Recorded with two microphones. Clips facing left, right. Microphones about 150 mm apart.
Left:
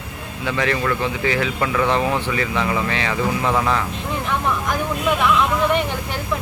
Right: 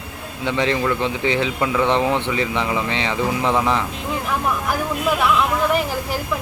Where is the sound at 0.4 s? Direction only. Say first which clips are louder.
Right 1 dB; 20° right (ahead or behind).